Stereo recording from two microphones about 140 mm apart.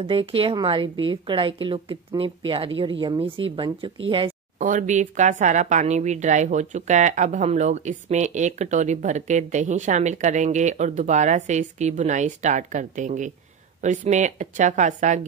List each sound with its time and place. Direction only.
0.0 s a woman's voice: 40° right (ahead or behind)
4.6 s speech: 65° right (ahead or behind)